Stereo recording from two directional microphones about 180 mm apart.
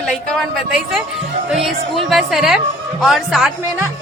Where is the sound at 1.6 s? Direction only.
Centre (ahead or behind).